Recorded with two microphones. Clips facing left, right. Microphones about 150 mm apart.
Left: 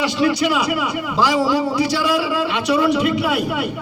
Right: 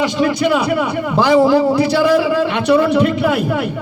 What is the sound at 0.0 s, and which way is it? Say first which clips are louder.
A man's voice: right 2 dB; 50° right (ahead or behind).